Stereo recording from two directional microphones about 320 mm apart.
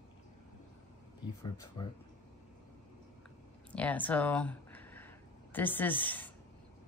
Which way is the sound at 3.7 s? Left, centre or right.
Centre.